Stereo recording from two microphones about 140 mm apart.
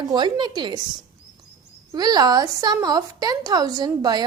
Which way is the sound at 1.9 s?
30° right (ahead or behind).